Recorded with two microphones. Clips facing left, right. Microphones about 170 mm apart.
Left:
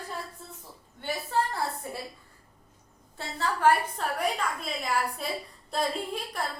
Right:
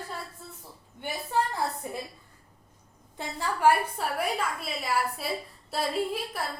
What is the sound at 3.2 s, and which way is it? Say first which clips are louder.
A woman's voice: even; 10° right (ahead or behind).